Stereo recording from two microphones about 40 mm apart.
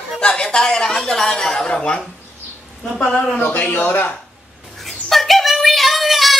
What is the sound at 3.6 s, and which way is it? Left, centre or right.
Speech, left.